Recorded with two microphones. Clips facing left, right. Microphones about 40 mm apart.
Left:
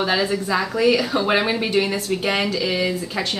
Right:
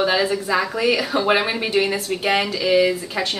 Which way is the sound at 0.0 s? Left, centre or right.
Centre.